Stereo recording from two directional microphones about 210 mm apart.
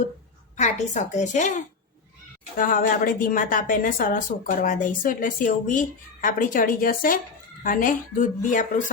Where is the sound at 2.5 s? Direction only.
40° left (ahead or behind).